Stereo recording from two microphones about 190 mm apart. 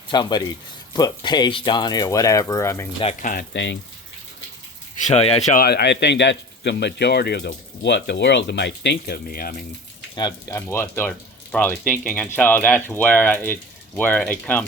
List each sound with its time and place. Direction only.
0.1 s speech: 20° left (ahead or behind)
3.0 s speech: 40° left (ahead or behind)
3.5 s speech: 70° left (ahead or behind)
5.0 s speech: 35° left (ahead or behind)
5.6 s speech: 60° left (ahead or behind)
10.2 s speech: 20° left (ahead or behind)